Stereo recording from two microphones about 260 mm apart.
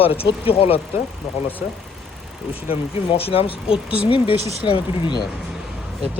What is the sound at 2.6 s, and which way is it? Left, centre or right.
Speech, left.